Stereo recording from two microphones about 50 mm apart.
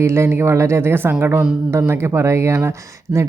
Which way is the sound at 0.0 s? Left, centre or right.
Right.